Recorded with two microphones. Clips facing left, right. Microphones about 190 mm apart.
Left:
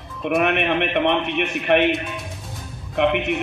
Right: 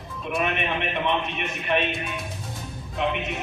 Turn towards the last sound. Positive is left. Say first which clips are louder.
# left 7 dB
turn(degrees=70)  # may be behind; listen again after turning